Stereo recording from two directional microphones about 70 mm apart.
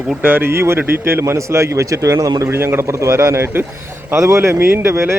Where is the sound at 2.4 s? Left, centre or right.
Right.